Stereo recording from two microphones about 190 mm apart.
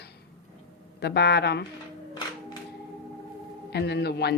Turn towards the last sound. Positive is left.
turn(degrees=60)  # may be behind; listen again after turning